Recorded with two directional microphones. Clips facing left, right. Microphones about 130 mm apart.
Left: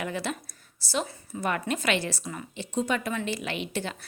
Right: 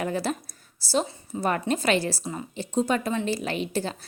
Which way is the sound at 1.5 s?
35° right (ahead or behind).